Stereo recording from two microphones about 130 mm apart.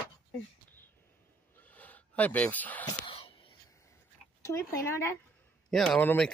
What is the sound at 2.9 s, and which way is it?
Wheeze, 40° left (ahead or behind).